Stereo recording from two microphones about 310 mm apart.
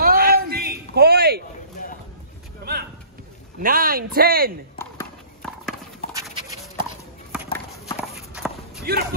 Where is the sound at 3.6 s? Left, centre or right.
Right.